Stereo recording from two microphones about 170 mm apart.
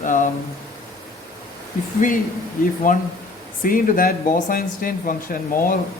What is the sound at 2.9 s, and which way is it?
A man's voice, 55° left (ahead or behind).